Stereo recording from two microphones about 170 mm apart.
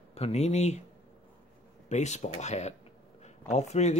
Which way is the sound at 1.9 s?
45° left (ahead or behind).